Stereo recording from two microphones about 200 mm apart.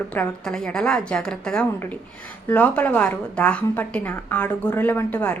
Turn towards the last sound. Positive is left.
turn(degrees=10)  # may be behind; listen again after turning